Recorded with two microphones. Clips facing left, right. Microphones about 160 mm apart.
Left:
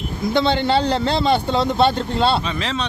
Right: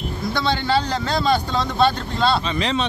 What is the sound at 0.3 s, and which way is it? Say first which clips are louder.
A man's voice: left 4 dB; 25° left (ahead or behind).